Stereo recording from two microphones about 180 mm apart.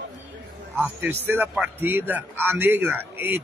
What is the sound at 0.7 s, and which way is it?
A man's voice, 10° right (ahead or behind).